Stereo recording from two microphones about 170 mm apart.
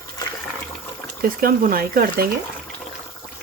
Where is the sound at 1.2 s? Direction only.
55° right (ahead or behind).